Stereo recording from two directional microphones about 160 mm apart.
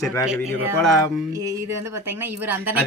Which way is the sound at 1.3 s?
20° right (ahead or behind).